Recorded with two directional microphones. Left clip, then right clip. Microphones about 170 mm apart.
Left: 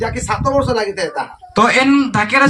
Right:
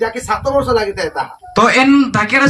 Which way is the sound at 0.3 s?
Centre (ahead or behind).